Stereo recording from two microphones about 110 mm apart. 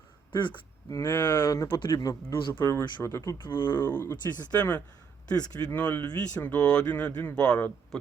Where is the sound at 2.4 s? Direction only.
45° left (ahead or behind).